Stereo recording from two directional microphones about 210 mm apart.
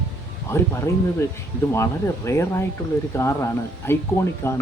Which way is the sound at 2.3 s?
15° left (ahead or behind).